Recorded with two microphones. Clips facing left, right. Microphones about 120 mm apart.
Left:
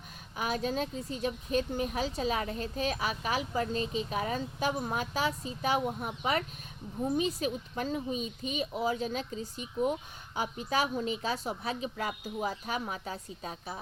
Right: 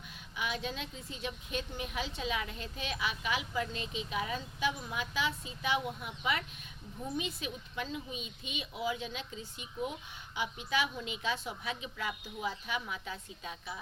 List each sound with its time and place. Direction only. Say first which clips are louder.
0.3 s a woman's voice: left 6 dB; 40° left (ahead or behind)